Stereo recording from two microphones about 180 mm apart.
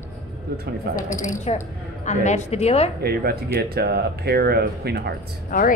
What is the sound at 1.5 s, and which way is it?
A woman's voice, 35° left (ahead or behind).